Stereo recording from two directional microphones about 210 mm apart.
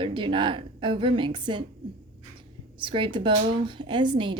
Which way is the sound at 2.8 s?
25° right (ahead or behind).